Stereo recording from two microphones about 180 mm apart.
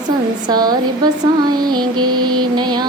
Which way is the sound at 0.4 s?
20° right (ahead or behind).